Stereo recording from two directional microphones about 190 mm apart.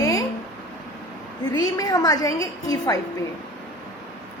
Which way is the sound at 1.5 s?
20° left (ahead or behind).